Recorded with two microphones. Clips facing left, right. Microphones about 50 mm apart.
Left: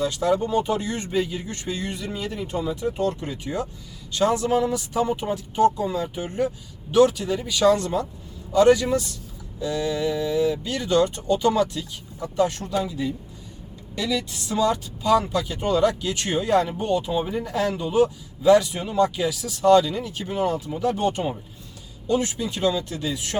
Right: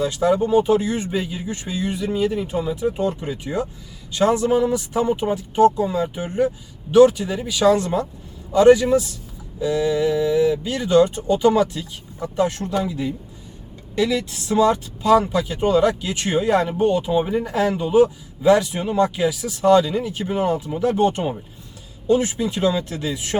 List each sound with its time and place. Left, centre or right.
0.0 s speech: centre
12.2 s speech: centre